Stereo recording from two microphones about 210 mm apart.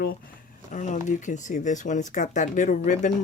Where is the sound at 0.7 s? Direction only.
35° left (ahead or behind).